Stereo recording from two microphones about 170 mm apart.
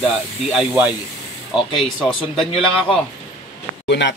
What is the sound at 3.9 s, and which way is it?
Speech, 90° left.